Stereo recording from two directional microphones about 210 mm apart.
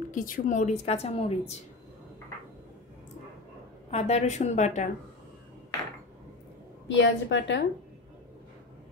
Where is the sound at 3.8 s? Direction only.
30° left (ahead or behind).